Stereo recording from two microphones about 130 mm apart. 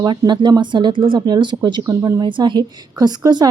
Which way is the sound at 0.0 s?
35° right (ahead or behind).